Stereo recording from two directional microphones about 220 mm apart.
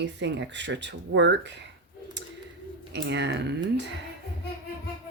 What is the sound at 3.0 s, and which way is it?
Speech, 50° right (ahead or behind).